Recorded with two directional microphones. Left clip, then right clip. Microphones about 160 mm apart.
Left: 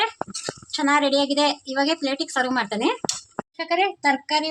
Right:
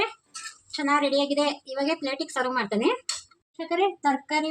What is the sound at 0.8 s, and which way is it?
Speech, 30° left (ahead or behind).